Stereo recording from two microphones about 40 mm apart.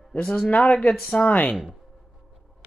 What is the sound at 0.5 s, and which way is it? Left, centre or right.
Speech, left.